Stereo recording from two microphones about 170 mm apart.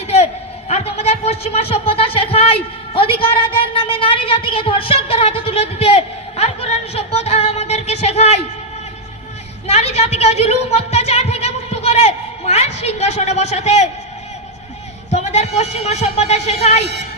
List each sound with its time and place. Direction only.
0.7 s a man's voice: 40° left (ahead or behind)
9.6 s a woman's voice: 40° left (ahead or behind)
15.1 s a man's voice: 40° left (ahead or behind)